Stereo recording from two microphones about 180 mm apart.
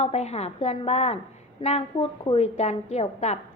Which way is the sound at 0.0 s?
35° left (ahead or behind).